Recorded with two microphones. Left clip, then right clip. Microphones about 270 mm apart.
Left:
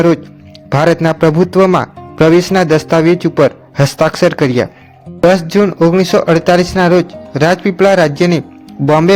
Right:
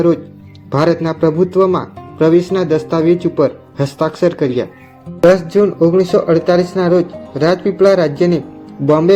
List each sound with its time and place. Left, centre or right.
0.7 s speech: left